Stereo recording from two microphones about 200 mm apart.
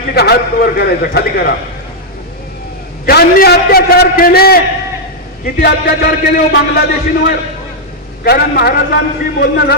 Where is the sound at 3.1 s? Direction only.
50° left (ahead or behind).